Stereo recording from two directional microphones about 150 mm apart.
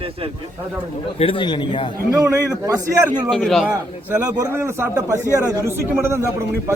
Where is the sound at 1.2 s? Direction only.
35° left (ahead or behind).